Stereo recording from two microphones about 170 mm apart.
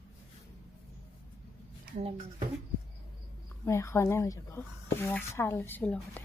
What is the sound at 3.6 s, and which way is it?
Speech, 15° left (ahead or behind).